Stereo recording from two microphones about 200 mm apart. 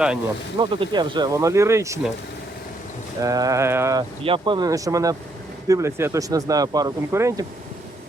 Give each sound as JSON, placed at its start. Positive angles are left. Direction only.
{"t": 0.6, "sound": "speech", "side_deg": -25}
{"t": 3.2, "sound": "speech", "side_deg": -15}
{"t": 4.2, "sound": "speech", "side_deg": -25}